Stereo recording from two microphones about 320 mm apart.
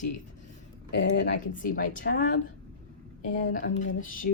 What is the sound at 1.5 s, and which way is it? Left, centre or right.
Speech, left.